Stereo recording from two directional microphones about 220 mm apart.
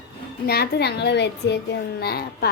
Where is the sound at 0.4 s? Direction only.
45° left (ahead or behind).